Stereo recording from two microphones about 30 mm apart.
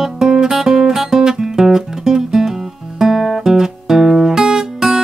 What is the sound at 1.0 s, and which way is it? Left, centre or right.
Music, centre.